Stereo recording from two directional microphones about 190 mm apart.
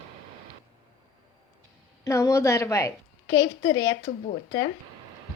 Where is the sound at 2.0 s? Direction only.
15° left (ahead or behind).